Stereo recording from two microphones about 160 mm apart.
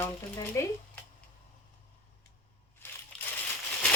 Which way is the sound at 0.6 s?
20° left (ahead or behind).